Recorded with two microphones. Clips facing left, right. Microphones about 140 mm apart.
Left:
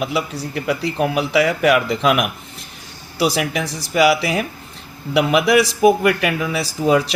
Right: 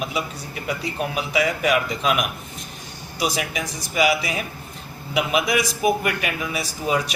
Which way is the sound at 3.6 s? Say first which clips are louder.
Left 4 dB; 35° left (ahead or behind).